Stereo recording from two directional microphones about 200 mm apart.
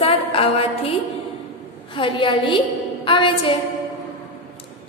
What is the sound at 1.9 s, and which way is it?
A woman's voice, 25° left (ahead or behind).